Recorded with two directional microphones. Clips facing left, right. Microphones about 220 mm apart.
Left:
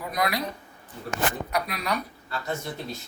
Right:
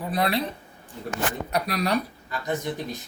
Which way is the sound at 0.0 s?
30° right (ahead or behind).